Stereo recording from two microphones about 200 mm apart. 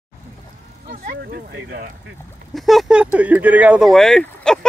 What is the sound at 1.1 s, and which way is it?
Speech, 55° right (ahead or behind).